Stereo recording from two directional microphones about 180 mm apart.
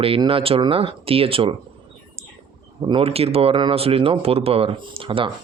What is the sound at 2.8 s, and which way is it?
Speech, 25° right (ahead or behind).